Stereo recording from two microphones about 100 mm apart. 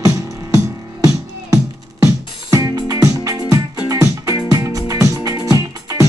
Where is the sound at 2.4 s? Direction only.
35° right (ahead or behind).